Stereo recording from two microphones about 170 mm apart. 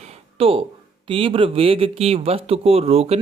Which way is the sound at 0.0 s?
35° right (ahead or behind).